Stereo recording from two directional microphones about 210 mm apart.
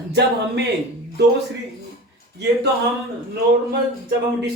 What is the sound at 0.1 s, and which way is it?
Speech, 55° right (ahead or behind).